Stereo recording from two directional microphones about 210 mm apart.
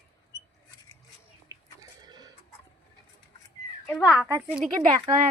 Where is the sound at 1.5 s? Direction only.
15° right (ahead or behind).